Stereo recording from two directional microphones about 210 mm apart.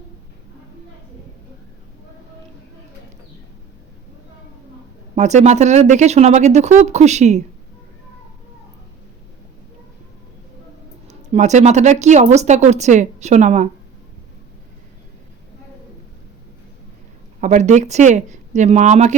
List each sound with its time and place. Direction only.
5.1 s a woman's voice: 35° right (ahead or behind)
11.1 s a woman's voice: 35° right (ahead or behind)
17.4 s a woman's voice: 35° right (ahead or behind)